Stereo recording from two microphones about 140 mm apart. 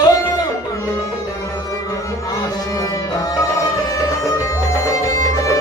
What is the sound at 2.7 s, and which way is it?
Music, 25° left (ahead or behind).